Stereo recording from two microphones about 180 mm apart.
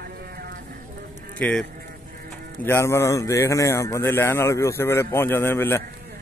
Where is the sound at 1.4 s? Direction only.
5° left (ahead or behind).